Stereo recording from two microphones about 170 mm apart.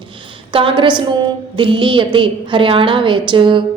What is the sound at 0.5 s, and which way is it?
A woman's voice, 30° right (ahead or behind).